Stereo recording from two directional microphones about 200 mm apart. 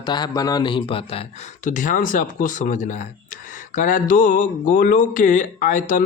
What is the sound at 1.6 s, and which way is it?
Speech, 40° left (ahead or behind).